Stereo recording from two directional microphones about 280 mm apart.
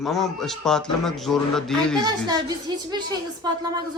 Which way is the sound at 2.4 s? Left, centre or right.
Centre.